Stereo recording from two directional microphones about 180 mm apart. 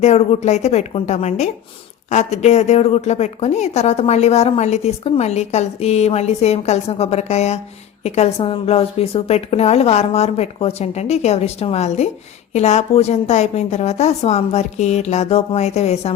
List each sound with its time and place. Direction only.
0.0 s a woman's voice: 35° left (ahead or behind)